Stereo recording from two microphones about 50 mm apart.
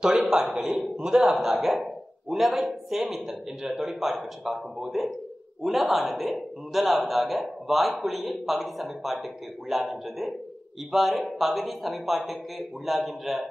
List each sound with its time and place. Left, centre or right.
0.0 s a man's voice: centre